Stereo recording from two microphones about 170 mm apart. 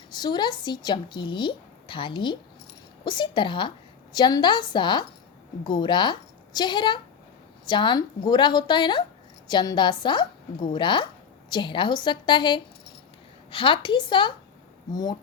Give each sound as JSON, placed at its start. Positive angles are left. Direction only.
{"t": 0.1, "sound": "a woman's voice", "side_deg": 25}